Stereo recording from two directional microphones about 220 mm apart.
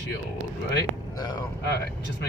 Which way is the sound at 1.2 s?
15° left (ahead or behind).